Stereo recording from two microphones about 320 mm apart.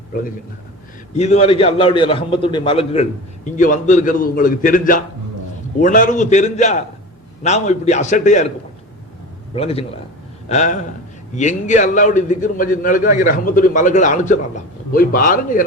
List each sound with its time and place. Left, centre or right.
1.1 s a man's voice: left
9.6 s a man's voice: centre